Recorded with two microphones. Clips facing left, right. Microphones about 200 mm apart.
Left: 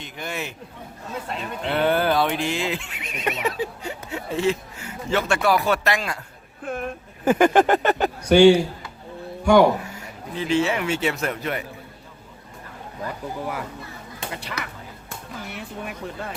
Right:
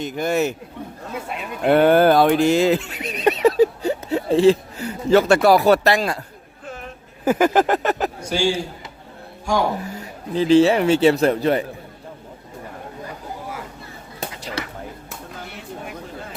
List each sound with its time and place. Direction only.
0.0 s a man's voice: 40° right (ahead or behind)
1.6 s speech: 45° right (ahead or behind)
6.7 s a sound: 55° left (ahead or behind)
7.3 s a sound: 5° right (ahead or behind)
8.3 s a man's voice: 65° left (ahead or behind)
10.3 s speech: 35° right (ahead or behind)
14.6 s whispering: 30° right (ahead or behind)